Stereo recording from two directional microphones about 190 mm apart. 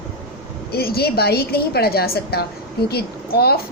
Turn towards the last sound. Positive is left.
turn(degrees=55)  # may be behind; listen again after turning